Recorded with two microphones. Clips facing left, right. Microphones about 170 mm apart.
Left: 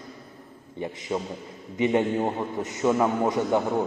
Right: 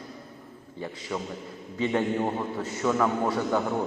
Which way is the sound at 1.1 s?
20° left (ahead or behind).